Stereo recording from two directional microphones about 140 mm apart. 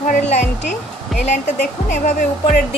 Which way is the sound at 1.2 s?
55° left (ahead or behind).